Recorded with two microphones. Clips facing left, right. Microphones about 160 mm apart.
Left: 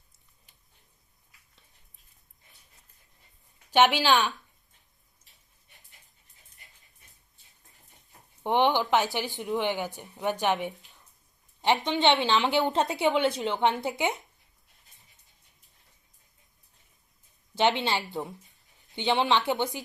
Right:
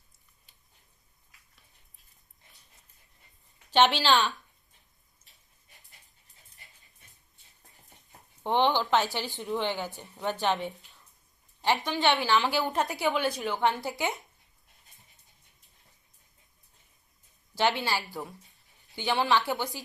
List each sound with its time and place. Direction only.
3.7 s a woman's voice: 10° left (ahead or behind)
8.4 s a woman's voice: 15° left (ahead or behind)
17.5 s a woman's voice: 20° left (ahead or behind)